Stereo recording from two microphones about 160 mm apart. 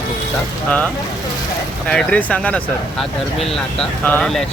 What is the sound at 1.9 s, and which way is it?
Speech, 5° left (ahead or behind).